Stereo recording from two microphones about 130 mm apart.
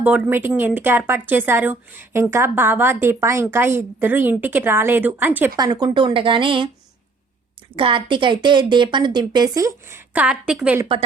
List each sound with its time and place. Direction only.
0.0 s a woman's voice: 15° right (ahead or behind)
5.5 s a woman's voice: 30° right (ahead or behind)
7.8 s a woman's voice: 40° right (ahead or behind)
10.1 s a woman's voice: 10° right (ahead or behind)